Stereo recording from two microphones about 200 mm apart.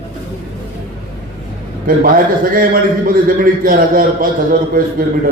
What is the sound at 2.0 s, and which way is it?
A man's voice, 45° right (ahead or behind).